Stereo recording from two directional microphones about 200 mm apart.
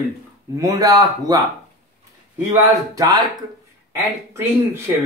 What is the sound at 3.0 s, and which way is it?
Speech, 20° right (ahead or behind).